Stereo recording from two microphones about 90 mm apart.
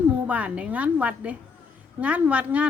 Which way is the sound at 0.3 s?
15° right (ahead or behind).